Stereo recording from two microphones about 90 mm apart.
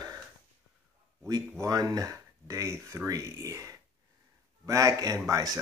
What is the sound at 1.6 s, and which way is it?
Speech, 40° right (ahead or behind).